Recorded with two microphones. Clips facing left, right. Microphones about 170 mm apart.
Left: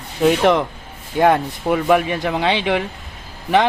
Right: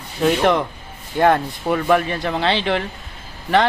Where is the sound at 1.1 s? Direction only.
5° left (ahead or behind).